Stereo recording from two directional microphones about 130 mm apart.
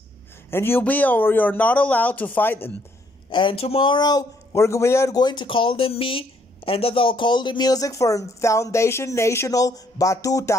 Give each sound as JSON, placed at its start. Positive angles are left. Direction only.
{"t": 0.5, "sound": "speech", "side_deg": 15}
{"t": 3.3, "sound": "a man's voice", "side_deg": 40}